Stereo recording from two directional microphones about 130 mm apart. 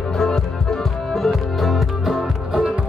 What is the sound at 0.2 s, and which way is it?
Music, 5° left (ahead or behind).